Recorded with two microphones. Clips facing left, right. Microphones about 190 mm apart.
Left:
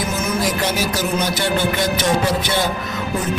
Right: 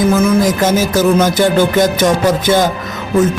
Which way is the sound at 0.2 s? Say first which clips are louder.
Right 9 dB; 45° right (ahead or behind).